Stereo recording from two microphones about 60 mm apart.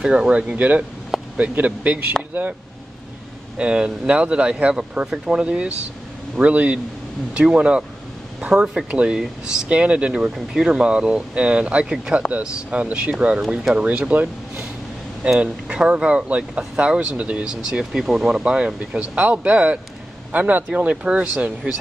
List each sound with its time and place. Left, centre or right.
0.0 s speech: centre
1.1 s a sound: centre
1.5 s speech: right
3.5 s speech: centre
13.4 s speech: centre
13.7 s speech: right
17.6 s speech: centre